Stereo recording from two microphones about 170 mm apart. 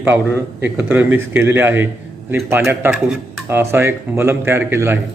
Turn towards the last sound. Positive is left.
turn(degrees=-15)  # may be behind; listen again after turning